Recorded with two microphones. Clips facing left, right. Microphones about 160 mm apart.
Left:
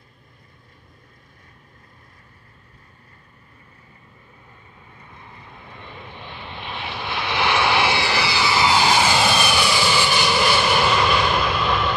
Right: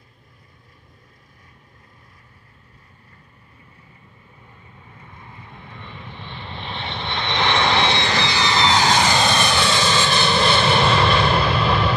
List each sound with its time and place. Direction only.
6.2 s vehicle: 5° left (ahead or behind)